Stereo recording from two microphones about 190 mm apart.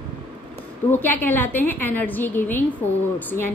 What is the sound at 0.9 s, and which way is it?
A woman's voice, 10° left (ahead or behind).